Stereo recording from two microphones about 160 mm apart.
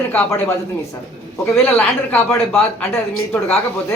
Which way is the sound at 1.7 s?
10° left (ahead or behind).